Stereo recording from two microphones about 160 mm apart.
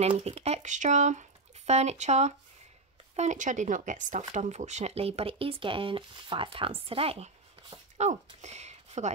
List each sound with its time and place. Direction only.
0.0 s speech: 40° right (ahead or behind)